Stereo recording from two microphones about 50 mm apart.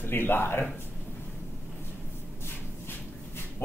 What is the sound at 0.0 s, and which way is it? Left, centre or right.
Speech, left.